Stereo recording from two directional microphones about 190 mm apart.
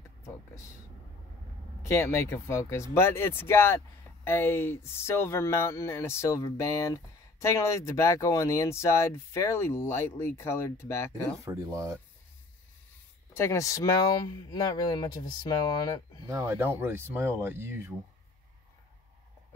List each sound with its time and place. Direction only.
1.9 s speech: 15° left (ahead or behind)
11.4 s speech: 15° right (ahead or behind)
13.3 s speech: 15° left (ahead or behind)
16.3 s speech: 15° right (ahead or behind)